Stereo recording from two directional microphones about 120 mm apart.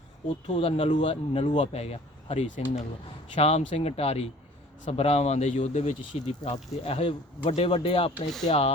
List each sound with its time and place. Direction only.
0.4 s speech: 55° left (ahead or behind)
8.4 s speech: 60° left (ahead or behind)